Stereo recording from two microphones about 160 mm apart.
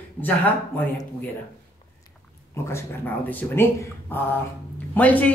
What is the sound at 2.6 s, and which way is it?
Speech, 15° left (ahead or behind).